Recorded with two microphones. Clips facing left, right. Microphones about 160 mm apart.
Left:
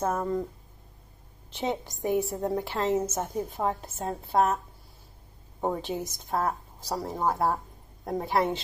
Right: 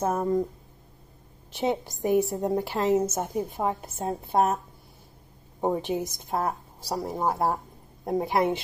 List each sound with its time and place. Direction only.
0.0 s a woman's voice: 15° right (ahead or behind)
1.5 s a woman's voice: 10° right (ahead or behind)
5.6 s a woman's voice: 15° right (ahead or behind)